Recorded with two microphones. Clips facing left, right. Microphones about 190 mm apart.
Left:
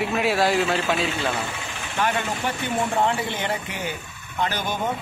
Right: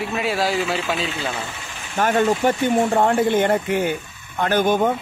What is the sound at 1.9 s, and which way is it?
Speech, 45° right (ahead or behind).